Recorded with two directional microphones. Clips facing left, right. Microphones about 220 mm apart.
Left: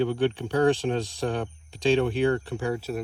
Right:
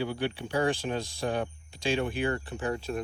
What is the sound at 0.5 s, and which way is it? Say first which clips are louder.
Speech: left 5 dB; 70° left (ahead or behind).